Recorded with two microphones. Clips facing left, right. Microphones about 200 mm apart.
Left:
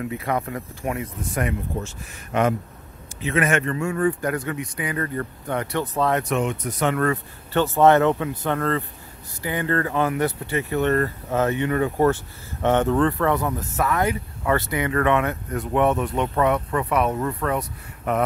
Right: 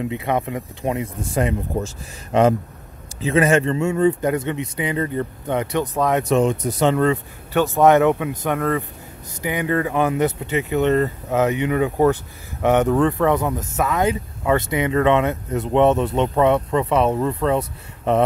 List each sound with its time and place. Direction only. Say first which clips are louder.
0.0 s speech: right 3 dB; 20° right (ahead or behind)
3.2 s speech: right 5 dB; 30° right (ahead or behind); by 6.2 s 15° right (ahead or behind)
6.2 s speech: right 6 dB; 30° right (ahead or behind)
7.5 s speech: right 2 dB; 10° right (ahead or behind)